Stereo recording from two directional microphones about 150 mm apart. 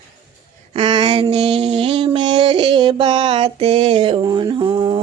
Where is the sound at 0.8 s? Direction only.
35° right (ahead or behind).